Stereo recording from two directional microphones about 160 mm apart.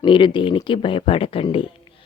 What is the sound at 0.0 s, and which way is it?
Speech, 30° left (ahead or behind).